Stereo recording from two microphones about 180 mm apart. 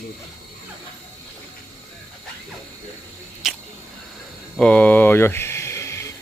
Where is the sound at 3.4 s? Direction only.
Centre (ahead or behind); by 6.1 s 15° left (ahead or behind).